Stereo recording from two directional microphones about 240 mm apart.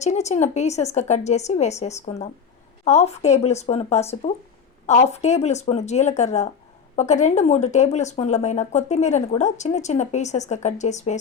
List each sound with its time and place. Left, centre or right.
0.0 s speech: left